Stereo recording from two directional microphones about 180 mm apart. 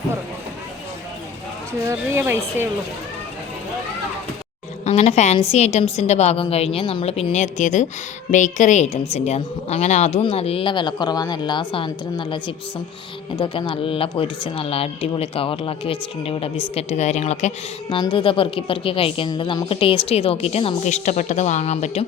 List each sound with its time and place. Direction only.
1.8 s speech: 15° right (ahead or behind)
4.9 s speech: 35° left (ahead or behind)